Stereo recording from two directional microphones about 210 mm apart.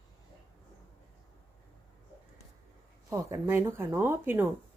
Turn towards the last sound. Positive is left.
turn(degrees=-10)  # may be behind; listen again after turning